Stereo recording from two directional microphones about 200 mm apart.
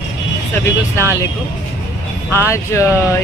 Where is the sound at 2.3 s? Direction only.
15° left (ahead or behind).